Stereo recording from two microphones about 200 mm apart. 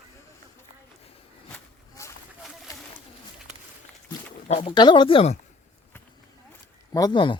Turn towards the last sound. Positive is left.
turn(degrees=25)  # may be behind; listen again after turning